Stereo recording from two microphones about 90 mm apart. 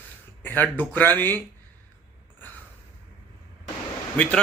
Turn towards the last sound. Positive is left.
turn(degrees=15)  # may be behind; listen again after turning